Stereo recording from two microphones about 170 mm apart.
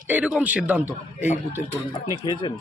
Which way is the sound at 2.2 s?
30° left (ahead or behind).